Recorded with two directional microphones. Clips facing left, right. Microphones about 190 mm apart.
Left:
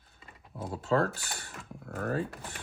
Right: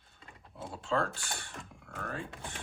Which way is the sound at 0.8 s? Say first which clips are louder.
Left 5 dB; 40° left (ahead or behind).